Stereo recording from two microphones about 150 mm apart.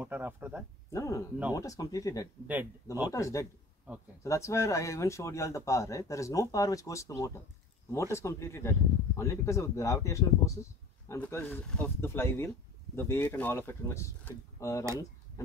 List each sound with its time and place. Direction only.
0.0 s speech: 15° right (ahead or behind)
0.9 s speech: 20° left (ahead or behind)
2.4 s speech: 10° right (ahead or behind)
3.1 s speech: 20° left (ahead or behind)